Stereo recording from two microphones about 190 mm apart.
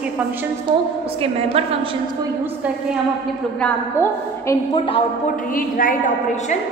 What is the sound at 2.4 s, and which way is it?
Speech, 10° right (ahead or behind).